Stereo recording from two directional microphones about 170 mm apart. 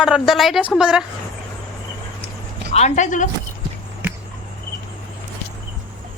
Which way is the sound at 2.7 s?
45° left (ahead or behind).